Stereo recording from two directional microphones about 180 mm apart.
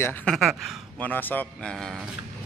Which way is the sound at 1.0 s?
10° left (ahead or behind).